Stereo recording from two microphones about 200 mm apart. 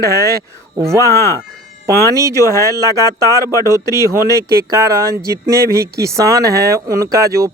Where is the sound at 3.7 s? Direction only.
15° right (ahead or behind).